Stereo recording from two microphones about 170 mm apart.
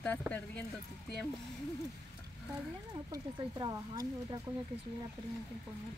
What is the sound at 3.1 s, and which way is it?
Speech, 20° right (ahead or behind).